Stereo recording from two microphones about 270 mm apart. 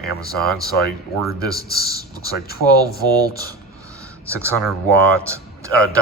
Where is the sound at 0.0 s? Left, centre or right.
Left.